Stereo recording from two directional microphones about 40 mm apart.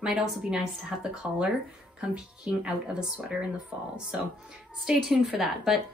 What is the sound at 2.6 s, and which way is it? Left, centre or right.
Speech, right.